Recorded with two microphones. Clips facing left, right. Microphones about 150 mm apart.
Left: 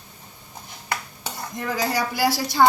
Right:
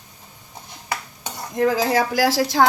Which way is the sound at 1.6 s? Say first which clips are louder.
Right 7 dB; 90° right.